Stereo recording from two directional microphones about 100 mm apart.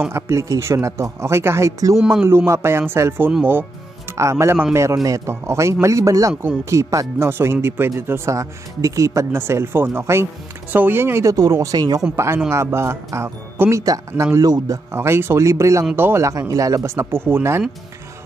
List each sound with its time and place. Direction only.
0.1 s a man's voice: 30° right (ahead or behind)
12.4 s a man's voice: 25° right (ahead or behind)
14.9 s speech: 25° right (ahead or behind)